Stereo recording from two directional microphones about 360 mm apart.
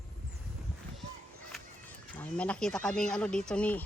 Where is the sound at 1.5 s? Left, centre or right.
Centre.